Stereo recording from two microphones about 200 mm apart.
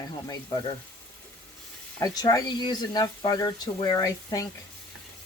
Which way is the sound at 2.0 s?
15° left (ahead or behind).